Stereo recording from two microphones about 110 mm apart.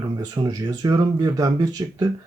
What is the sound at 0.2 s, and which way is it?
Speech, 35° right (ahead or behind).